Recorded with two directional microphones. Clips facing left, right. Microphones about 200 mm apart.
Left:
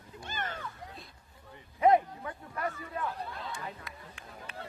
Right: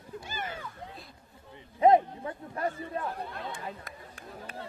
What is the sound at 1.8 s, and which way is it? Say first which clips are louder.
Speech: right 3 dB; 25° right (ahead or behind).